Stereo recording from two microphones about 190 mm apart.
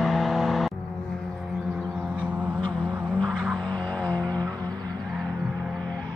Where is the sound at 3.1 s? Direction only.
5° left (ahead or behind).